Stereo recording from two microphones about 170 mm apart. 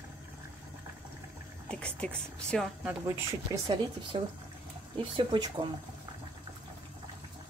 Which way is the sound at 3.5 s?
20° right (ahead or behind).